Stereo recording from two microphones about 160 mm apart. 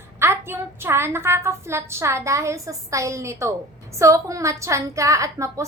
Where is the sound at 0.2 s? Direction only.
15° right (ahead or behind).